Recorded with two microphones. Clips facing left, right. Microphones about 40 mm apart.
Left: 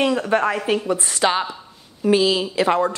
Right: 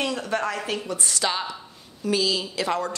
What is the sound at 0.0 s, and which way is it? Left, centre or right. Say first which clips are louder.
Speech: left 7 dB; left.